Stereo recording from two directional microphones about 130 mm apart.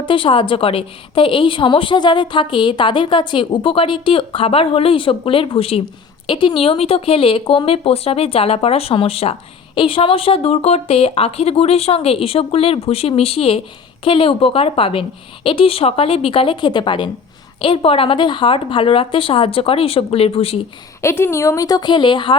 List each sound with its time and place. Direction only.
0.0 s a woman's voice: 40° left (ahead or behind)
21.0 s speech: 20° left (ahead or behind); by 22.4 s 40° left (ahead or behind)